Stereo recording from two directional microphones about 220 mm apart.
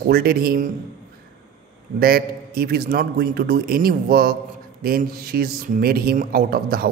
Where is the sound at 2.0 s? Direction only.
45° right (ahead or behind).